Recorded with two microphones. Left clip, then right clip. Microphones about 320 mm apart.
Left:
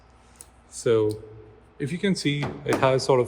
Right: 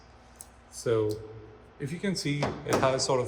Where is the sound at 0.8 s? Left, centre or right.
Left.